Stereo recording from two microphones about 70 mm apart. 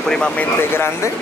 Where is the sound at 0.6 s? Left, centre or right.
Left.